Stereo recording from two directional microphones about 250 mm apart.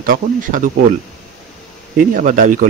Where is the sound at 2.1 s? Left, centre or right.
Right.